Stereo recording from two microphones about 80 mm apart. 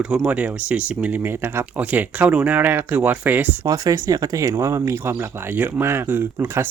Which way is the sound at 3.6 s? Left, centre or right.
Right.